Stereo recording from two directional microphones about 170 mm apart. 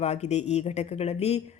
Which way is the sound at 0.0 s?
40° left (ahead or behind).